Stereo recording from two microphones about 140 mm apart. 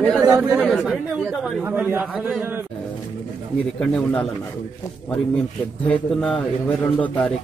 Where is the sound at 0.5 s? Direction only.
Centre (ahead or behind).